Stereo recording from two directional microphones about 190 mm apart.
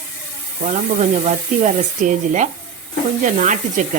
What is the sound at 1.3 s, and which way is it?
Speech, 40° right (ahead or behind).